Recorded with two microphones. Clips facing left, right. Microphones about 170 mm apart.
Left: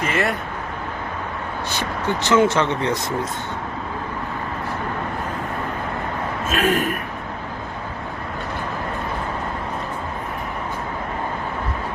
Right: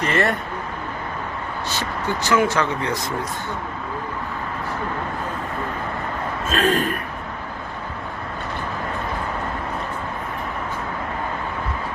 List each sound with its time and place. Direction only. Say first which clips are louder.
0.0 s speech: right 1 dB; 5° left (ahead or behind)
1.7 s speech: left 2 dB; 20° left (ahead or behind)
6.5 s a man's voice: even; 10° left (ahead or behind)